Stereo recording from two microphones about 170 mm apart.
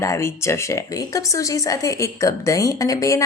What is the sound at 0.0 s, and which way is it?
Speech, 15° left (ahead or behind).